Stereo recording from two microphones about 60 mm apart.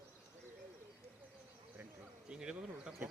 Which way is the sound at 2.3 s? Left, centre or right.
Centre.